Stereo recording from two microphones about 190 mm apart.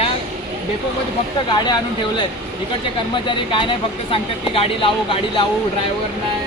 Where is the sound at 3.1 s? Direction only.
25° left (ahead or behind).